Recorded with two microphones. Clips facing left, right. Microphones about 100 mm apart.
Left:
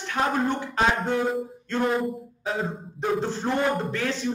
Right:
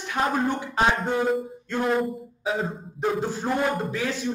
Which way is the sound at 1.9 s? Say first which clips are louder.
Right 1 dB; centre (ahead or behind).